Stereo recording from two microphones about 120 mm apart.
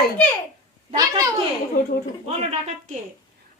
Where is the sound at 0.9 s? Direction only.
30° right (ahead or behind).